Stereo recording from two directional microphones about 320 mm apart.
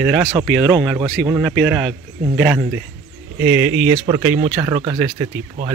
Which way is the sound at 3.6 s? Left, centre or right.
Right.